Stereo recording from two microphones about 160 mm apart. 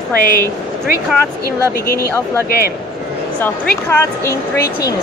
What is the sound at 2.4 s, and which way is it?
Speech, 70° left (ahead or behind).